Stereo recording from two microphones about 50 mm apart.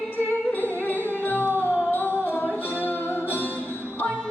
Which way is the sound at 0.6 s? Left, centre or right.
Left.